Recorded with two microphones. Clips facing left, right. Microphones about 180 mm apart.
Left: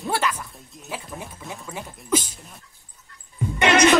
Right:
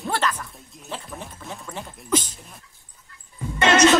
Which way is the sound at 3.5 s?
15° left (ahead or behind).